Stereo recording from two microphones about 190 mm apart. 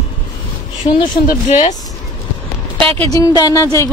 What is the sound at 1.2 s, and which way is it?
Speech, 40° left (ahead or behind).